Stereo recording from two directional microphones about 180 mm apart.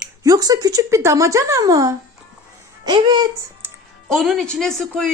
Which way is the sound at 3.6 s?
10° right (ahead or behind).